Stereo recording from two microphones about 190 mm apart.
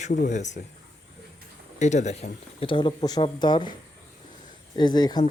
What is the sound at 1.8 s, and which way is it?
Speech, 40° left (ahead or behind).